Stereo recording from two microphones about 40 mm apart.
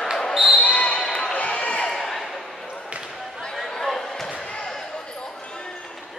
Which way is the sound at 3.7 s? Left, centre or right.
Centre.